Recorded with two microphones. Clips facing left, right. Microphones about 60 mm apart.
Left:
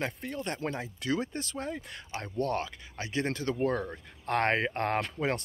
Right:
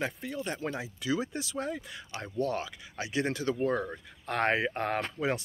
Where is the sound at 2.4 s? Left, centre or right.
Left.